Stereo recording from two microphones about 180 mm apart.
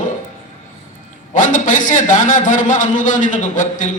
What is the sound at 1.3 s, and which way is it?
A man's voice, 45° left (ahead or behind).